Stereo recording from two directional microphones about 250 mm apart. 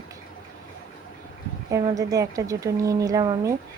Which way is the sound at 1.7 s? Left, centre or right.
Centre.